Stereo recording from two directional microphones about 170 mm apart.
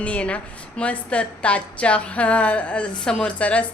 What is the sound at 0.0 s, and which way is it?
A woman's voice, 10° left (ahead or behind).